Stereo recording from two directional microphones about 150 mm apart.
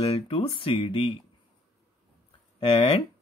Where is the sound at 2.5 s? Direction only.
40° left (ahead or behind).